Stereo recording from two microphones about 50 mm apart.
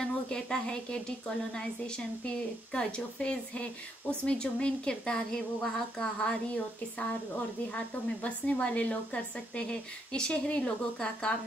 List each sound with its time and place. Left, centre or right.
0.0 s a woman's voice: centre